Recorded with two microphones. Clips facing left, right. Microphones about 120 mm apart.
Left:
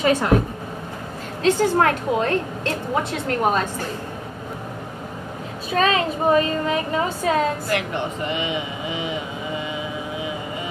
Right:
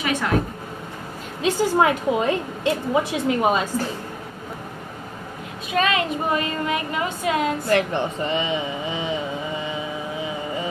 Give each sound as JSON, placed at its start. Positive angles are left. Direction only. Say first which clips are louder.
{"t": 0.0, "sound": "a woman's voice", "louder": "left 5 dB", "side_deg": 35}
{"t": 1.4, "sound": "a woman's voice", "louder": "left 1 dB", "side_deg": -10}
{"t": 5.7, "sound": "a woman's voice", "louder": "left 2 dB", "side_deg": 35}
{"t": 7.7, "sound": "speech", "louder": "right 3 dB", "side_deg": -30}